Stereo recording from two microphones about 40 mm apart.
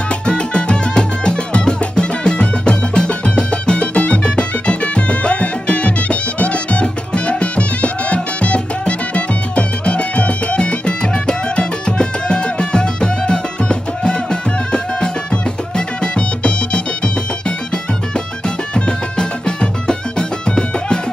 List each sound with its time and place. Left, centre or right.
0.3 s music: left
18.9 s music: left